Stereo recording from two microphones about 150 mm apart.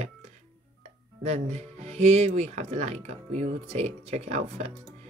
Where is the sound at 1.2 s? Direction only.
50° right (ahead or behind).